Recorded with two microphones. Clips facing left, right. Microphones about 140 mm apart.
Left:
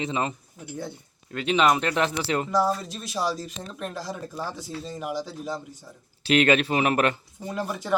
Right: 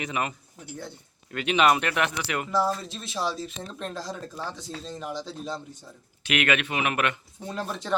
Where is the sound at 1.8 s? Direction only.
30° left (ahead or behind).